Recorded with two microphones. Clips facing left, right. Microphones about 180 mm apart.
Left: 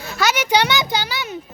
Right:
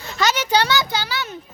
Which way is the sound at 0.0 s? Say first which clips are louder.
Left 1 dB; 10° left (ahead or behind).